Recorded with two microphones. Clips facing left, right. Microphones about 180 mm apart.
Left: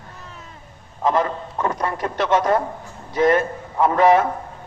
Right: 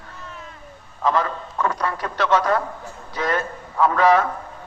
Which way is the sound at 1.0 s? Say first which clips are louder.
Left 2 dB; 20° left (ahead or behind).